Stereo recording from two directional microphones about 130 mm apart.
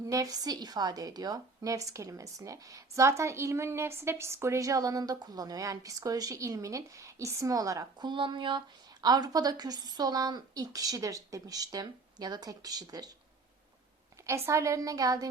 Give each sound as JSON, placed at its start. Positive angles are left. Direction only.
{"t": 0.1, "sound": "a woman's voice", "side_deg": -30}
{"t": 14.3, "sound": "a woman's voice", "side_deg": -20}